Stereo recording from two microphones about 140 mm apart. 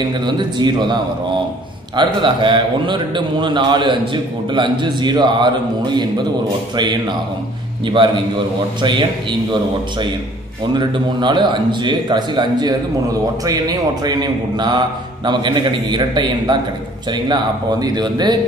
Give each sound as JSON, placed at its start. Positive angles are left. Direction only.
{"t": 0.2, "sound": "a man's voice", "side_deg": -30}